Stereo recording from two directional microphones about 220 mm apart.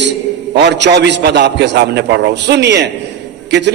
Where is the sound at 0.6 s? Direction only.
50° right (ahead or behind).